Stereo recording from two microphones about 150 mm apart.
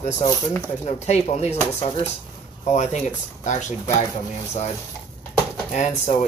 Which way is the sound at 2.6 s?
50° left (ahead or behind).